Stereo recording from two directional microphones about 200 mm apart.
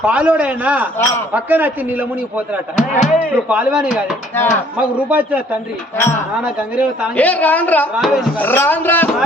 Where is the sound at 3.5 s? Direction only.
5° right (ahead or behind).